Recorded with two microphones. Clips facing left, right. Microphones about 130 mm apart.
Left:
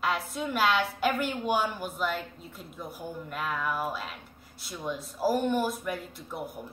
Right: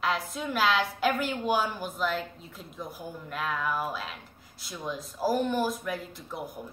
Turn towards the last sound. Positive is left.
turn(degrees=5)  # may be behind; listen again after turning